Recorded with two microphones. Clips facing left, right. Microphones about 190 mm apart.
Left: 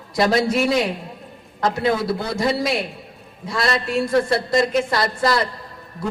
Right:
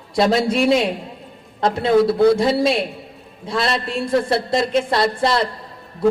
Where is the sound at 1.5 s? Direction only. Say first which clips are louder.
Right 5 dB; 30° right (ahead or behind).